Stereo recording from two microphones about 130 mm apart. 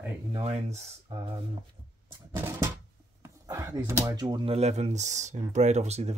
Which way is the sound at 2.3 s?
20° right (ahead or behind).